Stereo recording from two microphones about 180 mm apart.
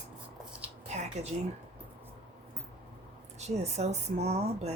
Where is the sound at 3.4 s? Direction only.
40° right (ahead or behind).